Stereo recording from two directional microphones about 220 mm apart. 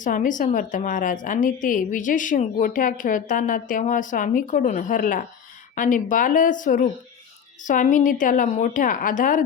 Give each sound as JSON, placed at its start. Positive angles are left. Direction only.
{"t": 0.0, "sound": "a woman's voice", "side_deg": 35}